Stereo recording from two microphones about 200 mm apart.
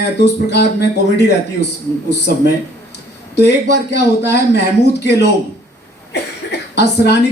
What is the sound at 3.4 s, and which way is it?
Speech, 55° left (ahead or behind).